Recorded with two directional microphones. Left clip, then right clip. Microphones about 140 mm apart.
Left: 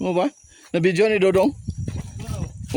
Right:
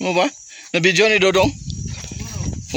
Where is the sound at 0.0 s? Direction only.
15° left (ahead or behind).